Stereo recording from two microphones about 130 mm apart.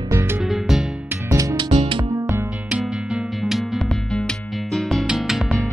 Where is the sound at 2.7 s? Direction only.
5° right (ahead or behind).